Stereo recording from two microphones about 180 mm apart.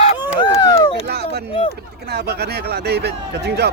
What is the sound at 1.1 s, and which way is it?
Speech, 65° right (ahead or behind).